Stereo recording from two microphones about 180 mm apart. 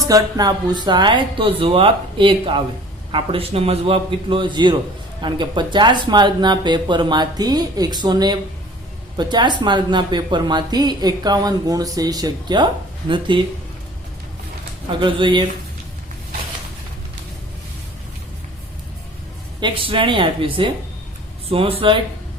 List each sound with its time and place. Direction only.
0.1 s speech: 20° right (ahead or behind)
15.0 s speech: 25° right (ahead or behind)
19.5 s speech: 25° right (ahead or behind)